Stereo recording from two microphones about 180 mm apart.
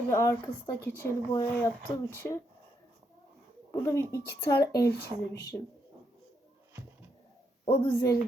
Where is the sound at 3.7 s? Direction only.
15° left (ahead or behind).